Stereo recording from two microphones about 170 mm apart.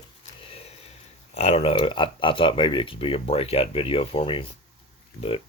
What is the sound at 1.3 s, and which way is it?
Speech, 35° left (ahead or behind).